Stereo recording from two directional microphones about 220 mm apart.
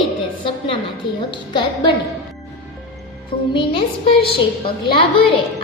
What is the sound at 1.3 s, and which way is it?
Speech, 20° left (ahead or behind).